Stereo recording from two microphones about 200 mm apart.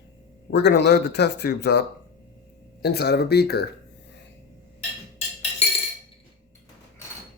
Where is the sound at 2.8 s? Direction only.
55° left (ahead or behind).